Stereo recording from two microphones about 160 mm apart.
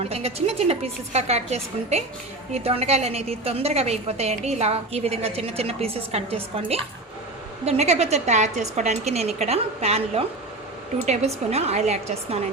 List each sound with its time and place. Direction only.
0.0 s a woman's voice: 40° right (ahead or behind)